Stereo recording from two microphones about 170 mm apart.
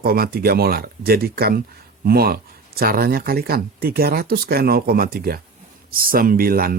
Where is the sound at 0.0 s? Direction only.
65° right (ahead or behind).